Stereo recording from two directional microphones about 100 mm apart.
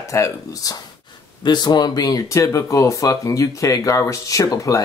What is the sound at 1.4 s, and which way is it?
Speech, 45° left (ahead or behind).